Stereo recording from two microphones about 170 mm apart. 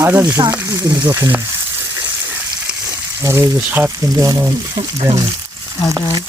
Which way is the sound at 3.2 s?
15° right (ahead or behind).